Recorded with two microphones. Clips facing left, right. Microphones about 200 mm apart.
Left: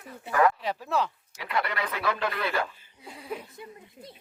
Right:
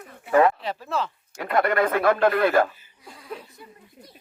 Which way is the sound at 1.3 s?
50° right (ahead or behind).